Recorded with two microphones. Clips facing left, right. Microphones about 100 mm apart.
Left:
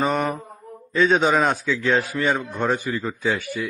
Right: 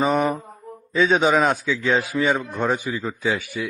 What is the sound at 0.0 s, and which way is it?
A man's voice, centre (ahead or behind).